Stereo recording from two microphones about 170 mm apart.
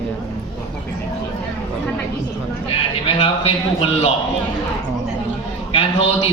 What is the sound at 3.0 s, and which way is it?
A man's voice, 35° left (ahead or behind).